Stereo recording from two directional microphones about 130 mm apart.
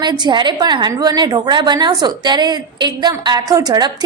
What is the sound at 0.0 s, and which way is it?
A woman's voice, 35° right (ahead or behind).